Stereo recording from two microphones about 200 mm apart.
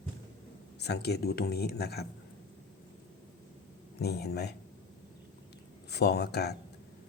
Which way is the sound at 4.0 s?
55° left (ahead or behind).